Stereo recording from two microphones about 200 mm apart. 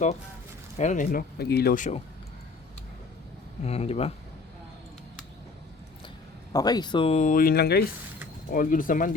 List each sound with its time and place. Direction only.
0.8 s speech: 40° left (ahead or behind)
3.6 s speech: 30° left (ahead or behind)
6.5 s speech: 20° left (ahead or behind); by 9.1 s 45° left (ahead or behind)